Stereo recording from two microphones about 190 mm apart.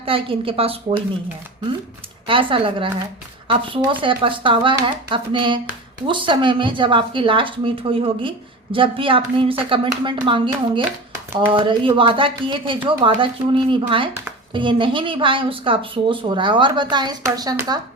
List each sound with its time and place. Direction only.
0.0 s a woman's voice: 30° right (ahead or behind)
2.2 s a woman's voice: 25° right (ahead or behind)